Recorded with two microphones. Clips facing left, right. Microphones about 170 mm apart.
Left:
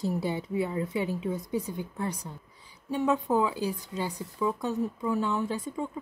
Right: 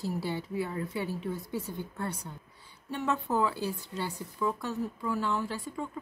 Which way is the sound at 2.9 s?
15° left (ahead or behind).